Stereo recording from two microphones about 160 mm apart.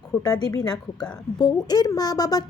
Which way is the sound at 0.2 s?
25° left (ahead or behind).